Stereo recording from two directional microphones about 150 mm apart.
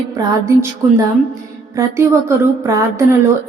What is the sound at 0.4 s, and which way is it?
A woman's voice, 20° right (ahead or behind).